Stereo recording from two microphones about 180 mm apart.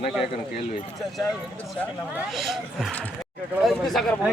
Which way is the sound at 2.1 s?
Centre (ahead or behind).